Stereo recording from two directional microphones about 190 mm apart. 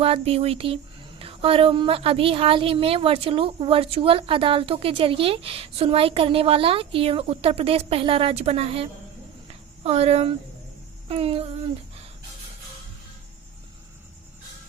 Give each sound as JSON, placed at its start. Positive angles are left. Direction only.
{"t": 0.0, "sound": "a woman's voice", "side_deg": -30}
{"t": 9.5, "sound": "a sound", "side_deg": -35}
{"t": 11.1, "sound": "speech", "side_deg": -30}